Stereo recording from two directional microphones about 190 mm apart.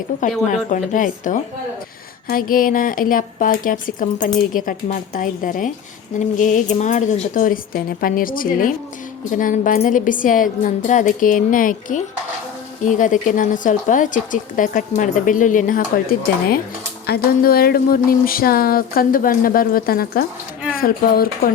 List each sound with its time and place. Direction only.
0.4 s speech: 40° left (ahead or behind)